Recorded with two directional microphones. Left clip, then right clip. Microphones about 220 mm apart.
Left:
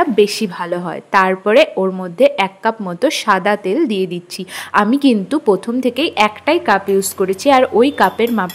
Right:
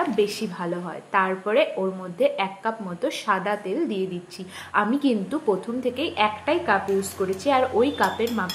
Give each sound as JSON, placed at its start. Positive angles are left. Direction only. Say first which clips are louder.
{"t": 0.1, "sound": "a woman's voice", "louder": "left 10 dB", "side_deg": 50}